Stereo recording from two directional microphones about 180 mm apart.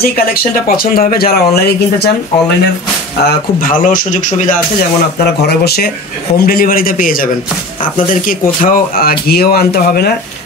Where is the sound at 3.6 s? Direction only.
50° left (ahead or behind).